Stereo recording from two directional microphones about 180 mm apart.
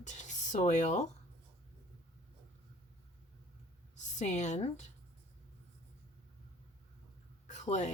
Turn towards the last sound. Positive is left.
turn(degrees=40)  # may be behind; listen again after turning